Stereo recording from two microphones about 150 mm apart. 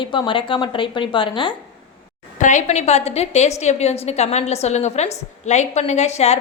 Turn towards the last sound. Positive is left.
turn(degrees=45)  # may be behind; listen again after turning